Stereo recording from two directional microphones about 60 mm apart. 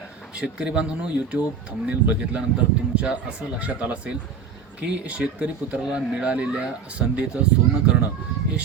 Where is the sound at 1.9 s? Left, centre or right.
Right.